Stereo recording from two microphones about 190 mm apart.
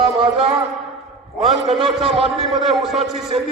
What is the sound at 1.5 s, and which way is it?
Speech, 30° right (ahead or behind).